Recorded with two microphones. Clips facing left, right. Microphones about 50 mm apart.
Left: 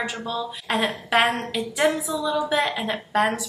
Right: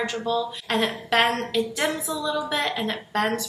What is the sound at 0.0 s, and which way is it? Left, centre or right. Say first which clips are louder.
A woman's voice: right 3 dB; centre.